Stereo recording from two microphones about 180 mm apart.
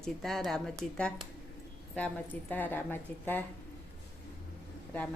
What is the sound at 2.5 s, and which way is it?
Speech, 10° left (ahead or behind).